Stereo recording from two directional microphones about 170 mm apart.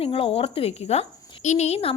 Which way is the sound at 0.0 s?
35° left (ahead or behind).